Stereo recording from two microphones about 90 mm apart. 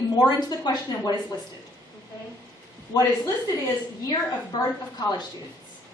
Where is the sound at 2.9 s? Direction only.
45° left (ahead or behind).